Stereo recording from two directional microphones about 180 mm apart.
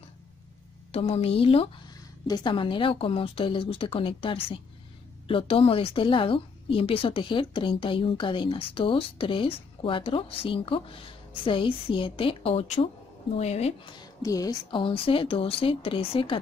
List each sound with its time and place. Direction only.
0.9 s a woman's voice: 35° left (ahead or behind)
13.9 s a woman's voice: 20° left (ahead or behind)